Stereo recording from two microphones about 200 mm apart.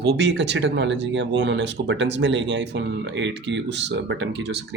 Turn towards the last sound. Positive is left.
turn(degrees=-60)  # may be behind; listen again after turning